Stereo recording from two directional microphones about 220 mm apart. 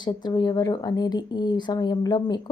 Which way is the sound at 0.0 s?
20° left (ahead or behind).